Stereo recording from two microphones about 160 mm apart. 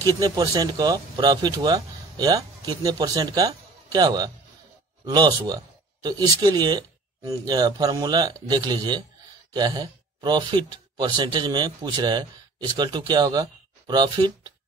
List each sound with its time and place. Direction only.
0.0 s speech: 25° right (ahead or behind)